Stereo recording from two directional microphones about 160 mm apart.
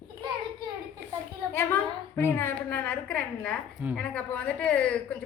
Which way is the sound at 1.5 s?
15° left (ahead or behind).